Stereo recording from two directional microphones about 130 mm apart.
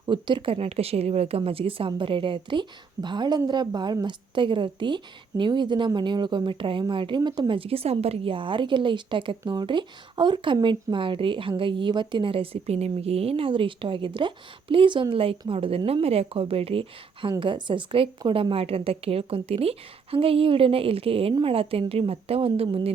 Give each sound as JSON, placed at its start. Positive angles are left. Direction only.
{"t": 0.0, "sound": "a woman's voice", "side_deg": -35}